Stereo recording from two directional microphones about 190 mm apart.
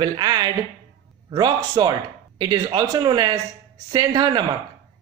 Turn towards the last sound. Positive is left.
turn(degrees=-20)  # may be behind; listen again after turning